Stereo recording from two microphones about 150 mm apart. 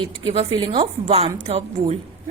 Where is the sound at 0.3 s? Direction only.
35° right (ahead or behind).